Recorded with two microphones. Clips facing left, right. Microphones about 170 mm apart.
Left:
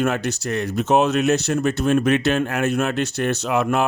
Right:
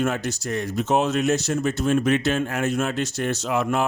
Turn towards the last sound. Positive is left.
turn(degrees=65)  # may be behind; listen again after turning